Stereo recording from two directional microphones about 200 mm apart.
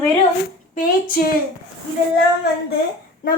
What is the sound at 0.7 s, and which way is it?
Speech, 45° left (ahead or behind).